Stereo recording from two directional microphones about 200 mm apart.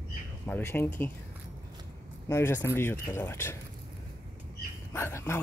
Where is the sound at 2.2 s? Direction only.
15° left (ahead or behind).